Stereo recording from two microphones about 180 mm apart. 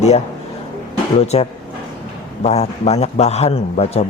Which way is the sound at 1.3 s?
35° left (ahead or behind).